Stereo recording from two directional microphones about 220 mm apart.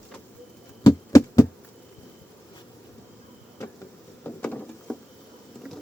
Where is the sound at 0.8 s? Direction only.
15° left (ahead or behind).